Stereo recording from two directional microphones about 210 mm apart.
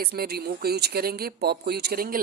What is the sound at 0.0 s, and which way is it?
Speech, 50° right (ahead or behind).